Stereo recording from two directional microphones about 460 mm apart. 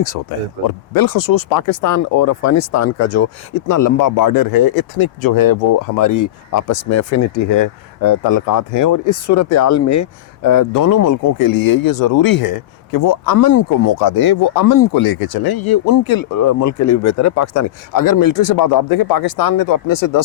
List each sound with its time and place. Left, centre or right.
0.0 s speech: left